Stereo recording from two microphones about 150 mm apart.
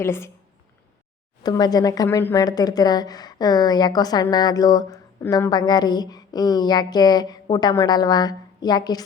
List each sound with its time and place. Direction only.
0.0 s speech: 15° left (ahead or behind)
1.5 s speech: 30° left (ahead or behind)